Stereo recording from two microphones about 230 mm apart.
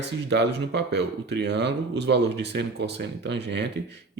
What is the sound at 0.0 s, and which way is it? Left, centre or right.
Speech, right.